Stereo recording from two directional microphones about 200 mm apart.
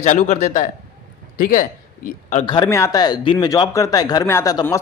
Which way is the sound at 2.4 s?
20° left (ahead or behind).